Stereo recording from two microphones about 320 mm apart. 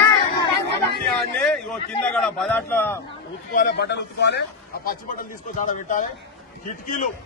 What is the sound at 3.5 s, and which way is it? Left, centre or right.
A man's voice, left.